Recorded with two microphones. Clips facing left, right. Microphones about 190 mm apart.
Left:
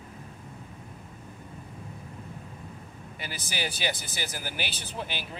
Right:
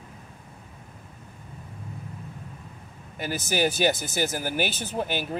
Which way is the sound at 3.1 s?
45° right (ahead or behind).